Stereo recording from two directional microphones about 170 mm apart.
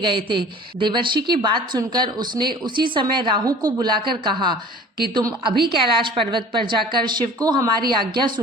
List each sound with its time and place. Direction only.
0.0 s a woman's voice: 30° right (ahead or behind)